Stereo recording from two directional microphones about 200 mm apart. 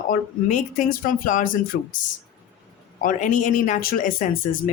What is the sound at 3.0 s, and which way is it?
Speech, 40° left (ahead or behind).